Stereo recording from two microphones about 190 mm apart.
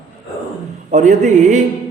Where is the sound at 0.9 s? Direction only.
40° right (ahead or behind).